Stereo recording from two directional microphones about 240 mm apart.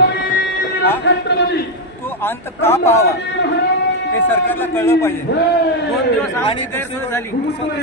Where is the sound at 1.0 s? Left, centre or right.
Left.